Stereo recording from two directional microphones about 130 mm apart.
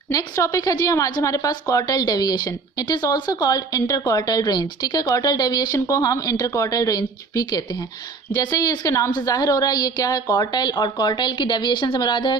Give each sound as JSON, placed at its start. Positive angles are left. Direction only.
{"t": 0.1, "sound": "a woman's voice", "side_deg": 25}